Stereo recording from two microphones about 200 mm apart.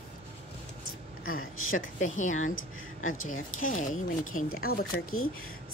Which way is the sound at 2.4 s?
90° left.